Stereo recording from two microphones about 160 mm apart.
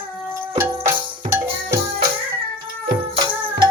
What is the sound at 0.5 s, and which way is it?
Music, 15° right (ahead or behind).